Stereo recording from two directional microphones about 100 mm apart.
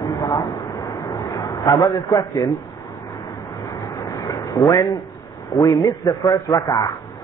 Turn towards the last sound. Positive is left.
turn(degrees=40)  # may be behind; listen again after turning